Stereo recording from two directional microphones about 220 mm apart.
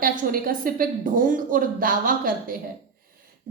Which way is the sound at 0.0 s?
40° right (ahead or behind).